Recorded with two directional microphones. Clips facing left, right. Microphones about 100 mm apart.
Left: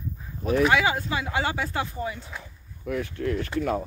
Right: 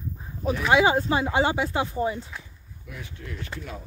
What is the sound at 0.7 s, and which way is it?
Speech, 25° right (ahead or behind).